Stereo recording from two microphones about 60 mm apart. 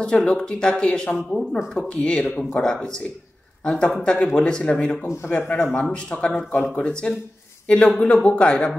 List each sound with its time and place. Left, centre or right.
0.0 s a man's voice: centre